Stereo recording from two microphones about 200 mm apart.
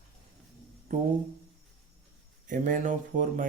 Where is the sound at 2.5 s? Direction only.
40° right (ahead or behind).